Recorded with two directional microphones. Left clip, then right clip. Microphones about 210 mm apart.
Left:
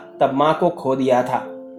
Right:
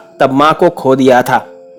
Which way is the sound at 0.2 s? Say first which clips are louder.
Right 8 dB; 50° right (ahead or behind).